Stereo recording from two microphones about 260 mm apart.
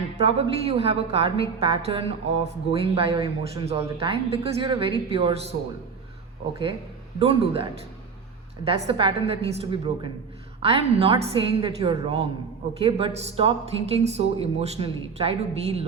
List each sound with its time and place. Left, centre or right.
0.3 s a woman's voice: right
7.2 s a woman's voice: right